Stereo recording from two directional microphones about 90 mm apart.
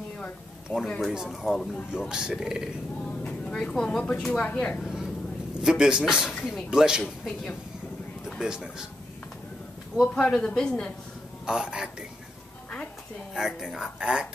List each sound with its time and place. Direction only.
0.7 s speech: 20° left (ahead or behind)
1.0 s speech: 5° right (ahead or behind)
3.1 s speech: 10° left (ahead or behind)
4.8 s vehicle: 5° right (ahead or behind)
5.6 s speech: 10° right (ahead or behind)
8.4 s speech: 10° right (ahead or behind)
10.2 s speech: 10° left (ahead or behind)
11.4 s speech: 10° right (ahead or behind)
13.3 s speech: 5° right (ahead or behind)